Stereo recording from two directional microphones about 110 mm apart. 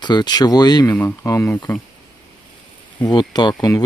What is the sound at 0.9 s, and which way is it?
Speech, 15° left (ahead or behind).